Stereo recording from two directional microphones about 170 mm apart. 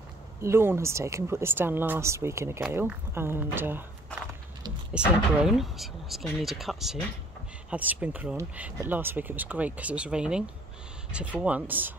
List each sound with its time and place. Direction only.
0.4 s speech: 15° right (ahead or behind)
4.9 s speech: 5° right (ahead or behind)